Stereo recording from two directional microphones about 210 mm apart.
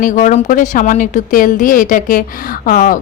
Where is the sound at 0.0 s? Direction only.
35° left (ahead or behind).